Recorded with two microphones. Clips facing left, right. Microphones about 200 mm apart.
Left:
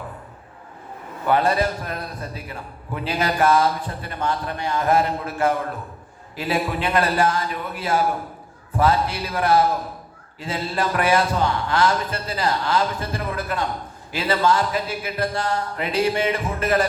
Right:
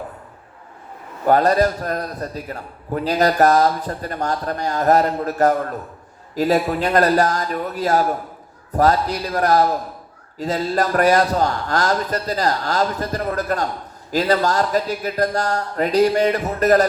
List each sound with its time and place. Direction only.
1.2 s a man's voice: 40° right (ahead or behind)